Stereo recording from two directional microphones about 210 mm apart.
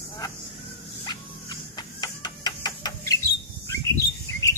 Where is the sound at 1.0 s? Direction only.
20° left (ahead or behind).